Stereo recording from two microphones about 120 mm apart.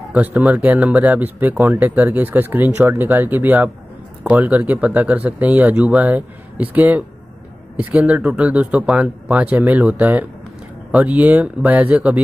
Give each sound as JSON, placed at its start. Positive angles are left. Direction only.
{"t": 0.1, "sound": "speech", "side_deg": -15}